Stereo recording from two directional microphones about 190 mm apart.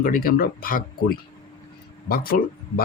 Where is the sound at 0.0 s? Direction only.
50° left (ahead or behind).